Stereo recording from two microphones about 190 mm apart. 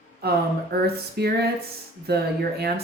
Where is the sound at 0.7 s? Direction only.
55° right (ahead or behind).